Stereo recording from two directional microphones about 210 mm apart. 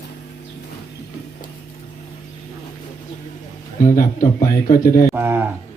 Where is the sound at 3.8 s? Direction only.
40° left (ahead or behind).